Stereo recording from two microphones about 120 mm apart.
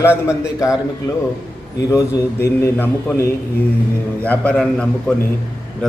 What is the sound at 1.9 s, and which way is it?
Mantra, 25° left (ahead or behind).